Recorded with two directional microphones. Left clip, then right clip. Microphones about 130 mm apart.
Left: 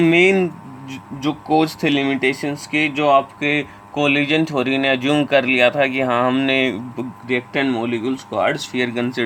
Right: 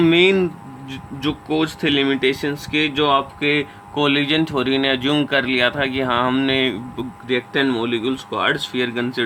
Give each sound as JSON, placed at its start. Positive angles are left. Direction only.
{"t": 0.0, "sound": "speech", "side_deg": 20}
{"t": 1.2, "sound": "speech", "side_deg": 35}
{"t": 2.3, "sound": "speech", "side_deg": 25}
{"t": 7.6, "sound": "speech", "side_deg": 0}
{"t": 8.1, "sound": "speech", "side_deg": 25}